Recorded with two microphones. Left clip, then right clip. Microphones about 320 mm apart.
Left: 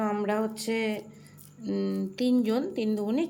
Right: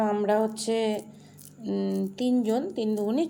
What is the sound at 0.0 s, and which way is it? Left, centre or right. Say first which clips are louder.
A woman's voice: right 4 dB; centre.